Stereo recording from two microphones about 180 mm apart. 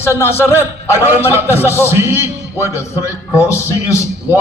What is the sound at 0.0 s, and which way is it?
A man's voice, 15° left (ahead or behind).